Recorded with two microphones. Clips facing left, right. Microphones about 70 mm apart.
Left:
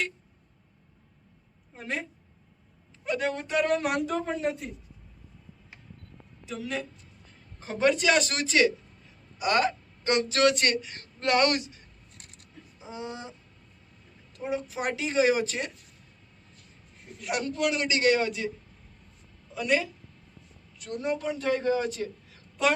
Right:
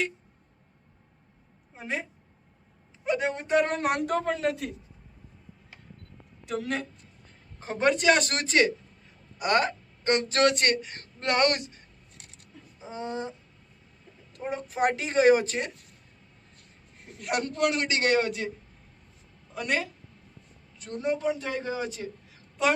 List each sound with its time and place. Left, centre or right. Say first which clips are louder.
1.7 s a woman's voice: right 1 dB; centre
3.4 s speech: right 2 dB; right
6.4 s speech: right 3 dB; right
7.6 s speech: even; right
12.8 s speech: right 4 dB; right
14.3 s speech: right 1 dB; right
17.0 s speech: right 1 dB; right
19.5 s speech: left 3 dB; right
20.7 s speech: right 1 dB; right
21.4 s a man's voice: left 5 dB; centre